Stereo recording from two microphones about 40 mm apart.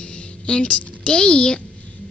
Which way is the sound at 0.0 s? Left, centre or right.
Left.